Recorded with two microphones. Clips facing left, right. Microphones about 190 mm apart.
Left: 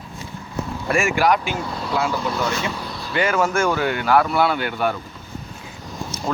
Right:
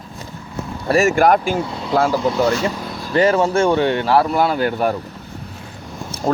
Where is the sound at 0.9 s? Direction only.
40° right (ahead or behind).